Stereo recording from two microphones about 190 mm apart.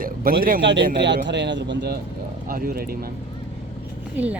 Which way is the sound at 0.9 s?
65° right (ahead or behind).